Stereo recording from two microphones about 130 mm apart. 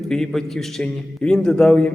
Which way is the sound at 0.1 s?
5° left (ahead or behind).